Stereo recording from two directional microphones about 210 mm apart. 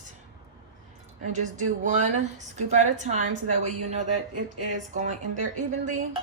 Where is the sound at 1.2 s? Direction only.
35° right (ahead or behind).